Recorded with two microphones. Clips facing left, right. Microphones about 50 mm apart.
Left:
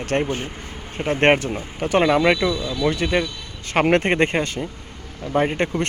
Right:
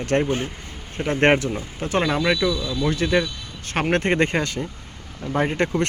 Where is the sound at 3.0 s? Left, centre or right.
Left.